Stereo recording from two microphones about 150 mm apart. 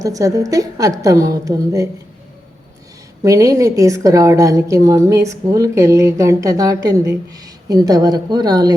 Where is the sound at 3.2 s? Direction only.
20° right (ahead or behind).